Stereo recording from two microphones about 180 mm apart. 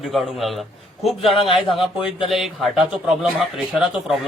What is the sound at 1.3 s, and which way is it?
Speech, 30° left (ahead or behind).